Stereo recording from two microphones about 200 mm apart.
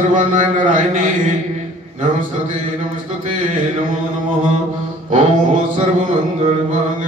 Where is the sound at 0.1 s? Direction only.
40° right (ahead or behind).